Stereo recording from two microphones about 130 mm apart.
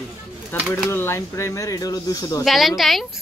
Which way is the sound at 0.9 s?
20° left (ahead or behind).